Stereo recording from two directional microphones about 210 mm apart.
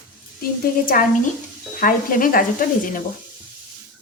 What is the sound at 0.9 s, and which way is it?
A woman's voice, 45° left (ahead or behind).